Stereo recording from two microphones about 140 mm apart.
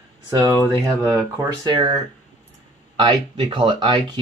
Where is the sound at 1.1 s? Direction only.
25° right (ahead or behind).